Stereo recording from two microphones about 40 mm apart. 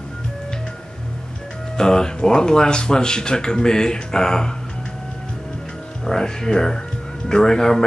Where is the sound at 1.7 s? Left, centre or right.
Centre.